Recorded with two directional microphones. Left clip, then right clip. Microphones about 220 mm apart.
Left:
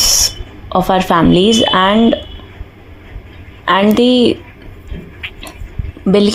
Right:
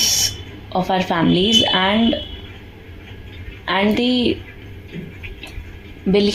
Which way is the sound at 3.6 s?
40° left (ahead or behind).